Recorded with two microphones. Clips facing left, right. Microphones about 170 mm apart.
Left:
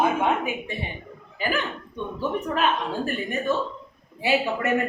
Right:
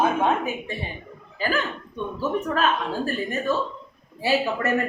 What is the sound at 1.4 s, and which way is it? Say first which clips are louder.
A woman's voice: right 1 dB; 20° left (ahead or behind).